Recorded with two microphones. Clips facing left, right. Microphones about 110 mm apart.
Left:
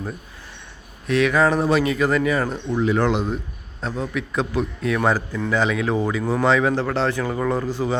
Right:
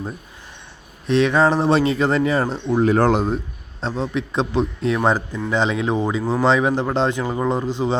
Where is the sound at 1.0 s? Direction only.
25° right (ahead or behind).